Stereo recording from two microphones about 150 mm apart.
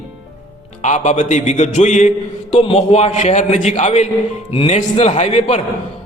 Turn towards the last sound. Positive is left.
turn(degrees=45)  # may be behind; listen again after turning